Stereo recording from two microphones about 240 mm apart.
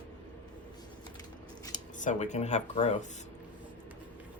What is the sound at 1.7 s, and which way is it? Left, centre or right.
Speech, left.